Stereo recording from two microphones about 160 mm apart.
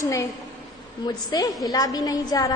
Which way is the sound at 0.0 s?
20° left (ahead or behind).